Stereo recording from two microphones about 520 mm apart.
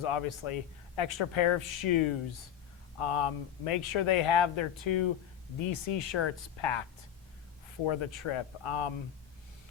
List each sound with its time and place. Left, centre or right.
0.0 s speech: left
3.0 s speech: left
7.9 s speech: left